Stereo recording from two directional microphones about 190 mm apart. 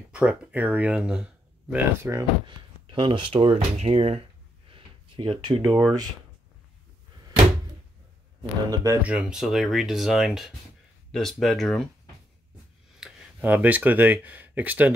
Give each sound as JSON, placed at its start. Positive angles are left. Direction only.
{"t": 0.1, "sound": "speech", "side_deg": -5}
{"t": 2.9, "sound": "speech", "side_deg": -25}
{"t": 5.7, "sound": "speech", "side_deg": 0}
{"t": 8.4, "sound": "speech", "side_deg": -20}
{"t": 9.0, "sound": "speech", "side_deg": -5}
{"t": 13.0, "sound": "speech", "side_deg": -10}